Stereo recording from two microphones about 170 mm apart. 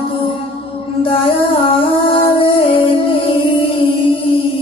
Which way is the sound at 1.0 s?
30° left (ahead or behind).